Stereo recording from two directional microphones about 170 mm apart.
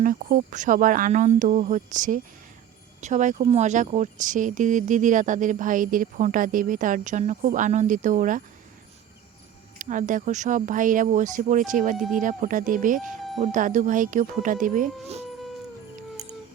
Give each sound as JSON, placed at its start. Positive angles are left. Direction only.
{"t": 0.0, "sound": "speech", "side_deg": -55}
{"t": 9.7, "sound": "speech", "side_deg": -50}